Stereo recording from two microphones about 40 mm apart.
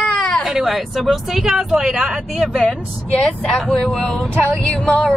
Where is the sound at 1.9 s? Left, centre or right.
Centre.